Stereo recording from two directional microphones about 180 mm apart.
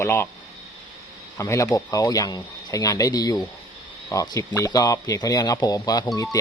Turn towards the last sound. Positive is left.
turn(degrees=20)  # may be behind; listen again after turning